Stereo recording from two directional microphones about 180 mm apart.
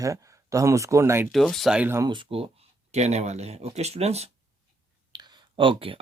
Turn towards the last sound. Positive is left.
turn(degrees=-30)  # may be behind; listen again after turning